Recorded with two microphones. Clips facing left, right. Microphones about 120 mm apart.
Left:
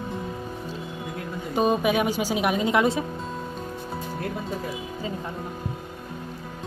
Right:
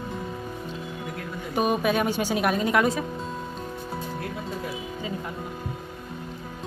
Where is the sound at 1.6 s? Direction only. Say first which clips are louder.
Left 2 dB; 25° left (ahead or behind).